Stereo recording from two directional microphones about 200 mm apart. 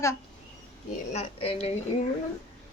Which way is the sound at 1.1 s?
30° left (ahead or behind).